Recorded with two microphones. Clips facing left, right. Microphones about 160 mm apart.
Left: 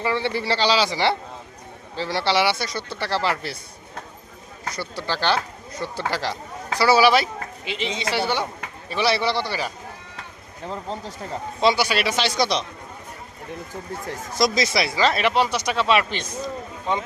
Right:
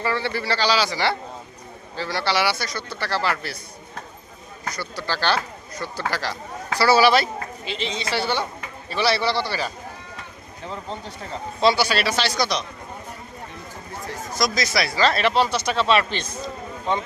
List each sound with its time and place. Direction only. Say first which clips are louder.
0.0 s speech: left 1 dB; 20° left (ahead or behind)
4.7 s speech: left 1 dB; 25° left (ahead or behind)
11.6 s speech: right 1 dB; 20° left (ahead or behind)
14.3 s speech: left 2 dB; 25° left (ahead or behind)